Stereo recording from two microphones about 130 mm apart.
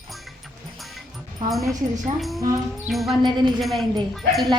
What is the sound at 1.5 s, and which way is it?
Speech, centre (ahead or behind).